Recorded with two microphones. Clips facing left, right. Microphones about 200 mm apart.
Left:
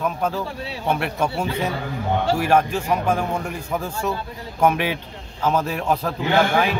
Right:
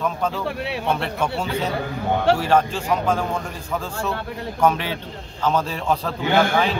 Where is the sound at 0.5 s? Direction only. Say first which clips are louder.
Right 5 dB; 65° right (ahead or behind).